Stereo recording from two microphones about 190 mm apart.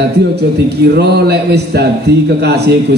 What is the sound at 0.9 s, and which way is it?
A man's voice, 60° right (ahead or behind).